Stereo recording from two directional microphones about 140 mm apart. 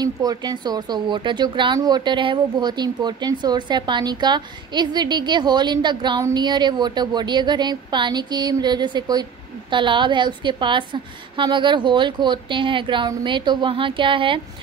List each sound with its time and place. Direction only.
0.0 s speech: 25° right (ahead or behind)